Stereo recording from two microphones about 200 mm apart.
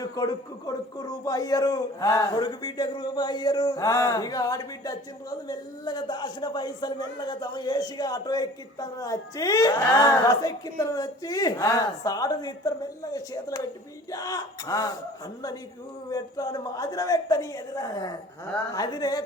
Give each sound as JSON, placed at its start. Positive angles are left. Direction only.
{"t": 0.0, "sound": "a man's voice", "side_deg": 20}
{"t": 16.0, "sound": "speech", "side_deg": 20}